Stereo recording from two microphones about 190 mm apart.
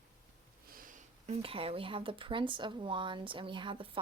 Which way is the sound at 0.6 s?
50° right (ahead or behind).